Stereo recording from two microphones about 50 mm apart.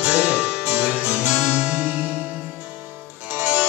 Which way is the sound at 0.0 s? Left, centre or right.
Right.